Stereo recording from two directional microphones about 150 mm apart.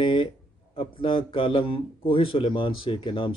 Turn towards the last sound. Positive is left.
turn(degrees=35)  # may be behind; listen again after turning